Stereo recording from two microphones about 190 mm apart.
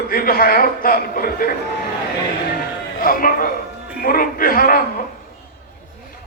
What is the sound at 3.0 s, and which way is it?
A man's voice, 45° left (ahead or behind).